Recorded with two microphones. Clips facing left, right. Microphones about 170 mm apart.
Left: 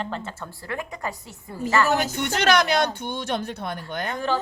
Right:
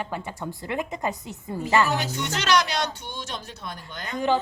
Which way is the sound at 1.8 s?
50° left (ahead or behind).